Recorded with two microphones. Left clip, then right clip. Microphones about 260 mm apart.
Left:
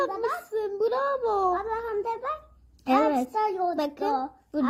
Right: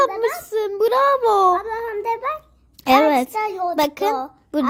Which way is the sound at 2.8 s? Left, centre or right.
Right.